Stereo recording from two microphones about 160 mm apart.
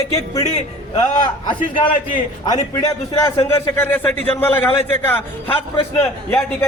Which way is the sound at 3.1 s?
20° left (ahead or behind).